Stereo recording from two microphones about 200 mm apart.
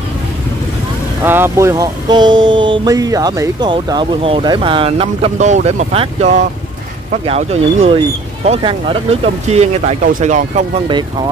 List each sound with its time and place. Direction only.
1.2 s speech: 10° right (ahead or behind); by 10.6 s 40° right (ahead or behind)